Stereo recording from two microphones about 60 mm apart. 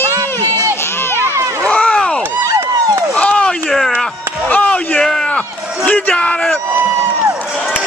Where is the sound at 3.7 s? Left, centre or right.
Centre.